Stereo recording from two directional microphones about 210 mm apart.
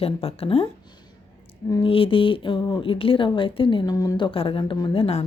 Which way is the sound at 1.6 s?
20° left (ahead or behind).